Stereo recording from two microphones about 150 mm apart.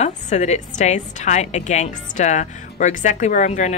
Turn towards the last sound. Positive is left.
turn(degrees=55)  # may be behind; listen again after turning